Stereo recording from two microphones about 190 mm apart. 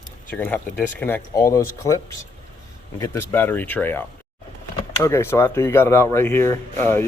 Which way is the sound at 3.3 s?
10° left (ahead or behind).